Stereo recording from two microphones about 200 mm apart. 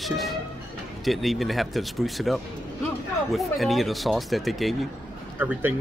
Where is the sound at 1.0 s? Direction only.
Centre (ahead or behind).